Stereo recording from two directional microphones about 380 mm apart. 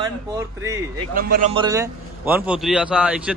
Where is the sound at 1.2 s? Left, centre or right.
Right.